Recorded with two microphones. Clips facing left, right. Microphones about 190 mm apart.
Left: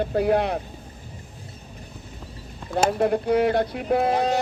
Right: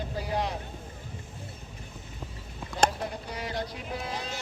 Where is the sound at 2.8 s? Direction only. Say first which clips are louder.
Left 10 dB; 60° left (ahead or behind).